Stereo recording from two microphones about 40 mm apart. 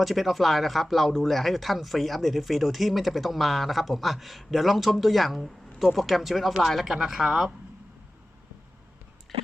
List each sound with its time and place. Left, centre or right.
0.0 s speech: centre
6.9 s speech: centre